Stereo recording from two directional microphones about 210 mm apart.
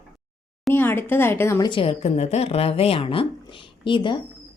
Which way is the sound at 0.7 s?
10° left (ahead or behind).